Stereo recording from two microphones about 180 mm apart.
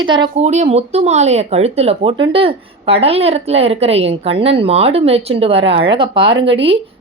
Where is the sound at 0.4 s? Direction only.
40° right (ahead or behind).